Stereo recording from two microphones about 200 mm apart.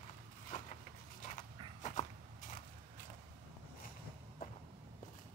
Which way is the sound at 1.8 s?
35° left (ahead or behind).